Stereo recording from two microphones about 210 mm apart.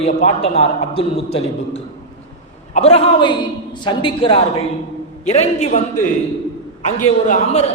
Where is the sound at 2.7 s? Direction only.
30° left (ahead or behind).